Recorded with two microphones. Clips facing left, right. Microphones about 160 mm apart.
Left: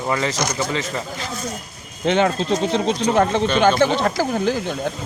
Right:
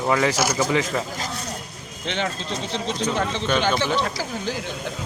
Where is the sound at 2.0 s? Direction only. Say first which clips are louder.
Left 10 dB; 50° left (ahead or behind).